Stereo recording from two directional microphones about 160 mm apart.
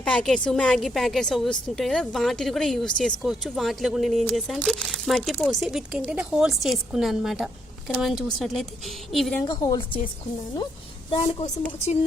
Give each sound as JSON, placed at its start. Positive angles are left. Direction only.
{"t": 0.0, "sound": "a woman's voice", "side_deg": 5}
{"t": 9.4, "sound": "a woman's voice", "side_deg": 25}
{"t": 11.1, "sound": "a woman's voice", "side_deg": 30}